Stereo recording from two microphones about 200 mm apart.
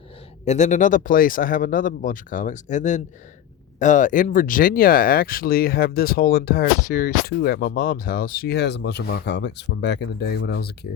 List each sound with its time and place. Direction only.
0.4 s speech: 35° left (ahead or behind); by 10.7 s 55° left (ahead or behind)